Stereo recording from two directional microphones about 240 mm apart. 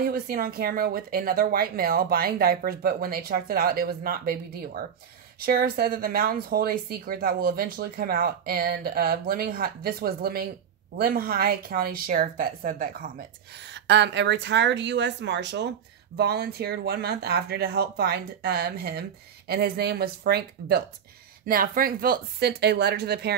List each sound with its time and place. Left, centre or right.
0.0 s speech: right
13.7 s speech: right